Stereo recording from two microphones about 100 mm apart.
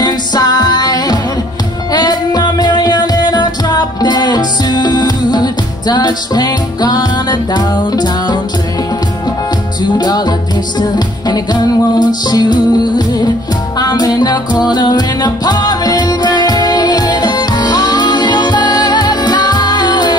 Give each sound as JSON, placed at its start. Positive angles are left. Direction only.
{"t": 0.0, "sound": "music", "side_deg": 45}
{"t": 9.9, "sound": "music", "side_deg": 40}